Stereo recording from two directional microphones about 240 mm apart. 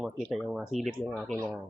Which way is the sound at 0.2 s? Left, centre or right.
Centre.